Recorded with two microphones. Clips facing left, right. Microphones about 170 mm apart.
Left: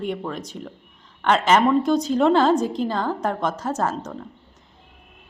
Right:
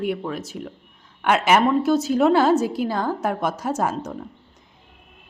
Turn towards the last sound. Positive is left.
turn(degrees=-10)  # may be behind; listen again after turning